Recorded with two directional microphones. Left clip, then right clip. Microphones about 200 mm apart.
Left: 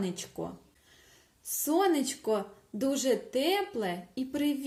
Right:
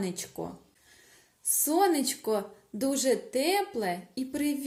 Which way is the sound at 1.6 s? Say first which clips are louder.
Right 2 dB; 15° left (ahead or behind).